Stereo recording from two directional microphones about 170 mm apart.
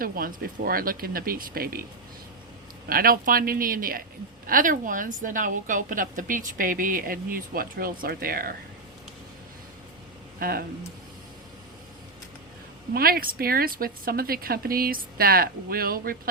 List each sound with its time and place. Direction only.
0.0 s speech: 60° right (ahead or behind)
2.9 s a woman's voice: 60° right (ahead or behind)
10.4 s speech: 60° right (ahead or behind)
12.9 s speech: 60° right (ahead or behind)